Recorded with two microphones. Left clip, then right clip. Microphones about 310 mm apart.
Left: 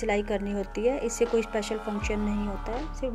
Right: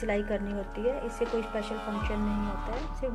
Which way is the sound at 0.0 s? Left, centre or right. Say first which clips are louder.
Left 3 dB; centre.